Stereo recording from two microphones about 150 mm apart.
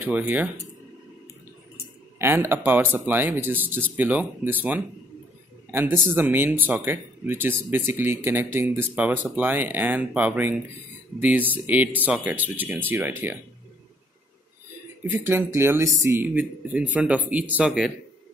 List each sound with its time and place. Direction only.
0.0 s speech: 10° right (ahead or behind)
2.1 s speech: 15° right (ahead or behind)
15.0 s speech: 15° right (ahead or behind)